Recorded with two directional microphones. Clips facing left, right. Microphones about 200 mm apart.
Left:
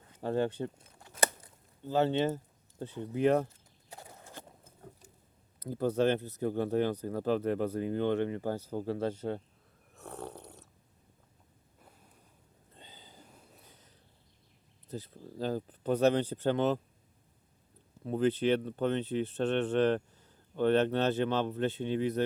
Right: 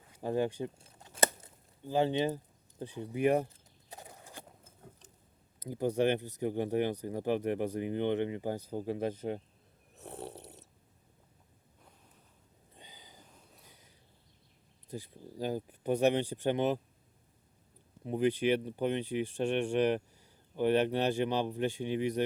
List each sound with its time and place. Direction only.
0.1 s speech: 15° right (ahead or behind)
0.8 s crunch: 25° right (ahead or behind)
1.8 s a sound: 15° right (ahead or behind)
4.6 s patter: 10° left (ahead or behind)
5.5 s speech: 15° right (ahead or behind)
9.9 s snoring: 20° right (ahead or behind)
12.7 s a sound: 15° right (ahead or behind)
14.8 s speech: 15° right (ahead or behind)
18.0 s speech: 15° right (ahead or behind)